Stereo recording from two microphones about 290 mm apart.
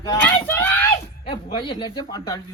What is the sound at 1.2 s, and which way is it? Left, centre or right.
Speech, centre.